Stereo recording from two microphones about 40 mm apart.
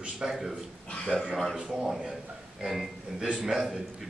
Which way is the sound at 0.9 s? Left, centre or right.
Left.